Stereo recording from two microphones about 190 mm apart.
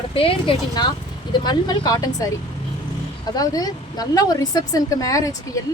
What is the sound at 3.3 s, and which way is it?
Speech, 20° left (ahead or behind).